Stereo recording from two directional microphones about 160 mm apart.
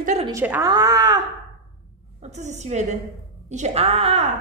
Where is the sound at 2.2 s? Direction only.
45° right (ahead or behind).